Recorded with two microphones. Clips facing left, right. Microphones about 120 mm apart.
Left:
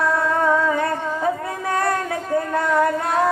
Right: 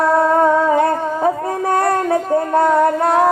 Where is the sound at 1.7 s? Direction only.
35° right (ahead or behind).